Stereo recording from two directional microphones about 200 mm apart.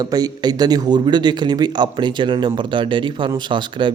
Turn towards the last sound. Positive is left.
turn(degrees=-25)  # may be behind; listen again after turning